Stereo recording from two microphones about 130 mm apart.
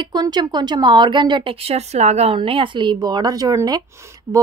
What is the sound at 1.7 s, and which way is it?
A woman's voice, 55° right (ahead or behind).